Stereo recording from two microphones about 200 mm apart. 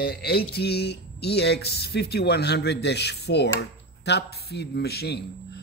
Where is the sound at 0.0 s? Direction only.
50° left (ahead or behind).